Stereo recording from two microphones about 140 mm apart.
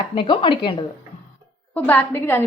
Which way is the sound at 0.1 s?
35° left (ahead or behind).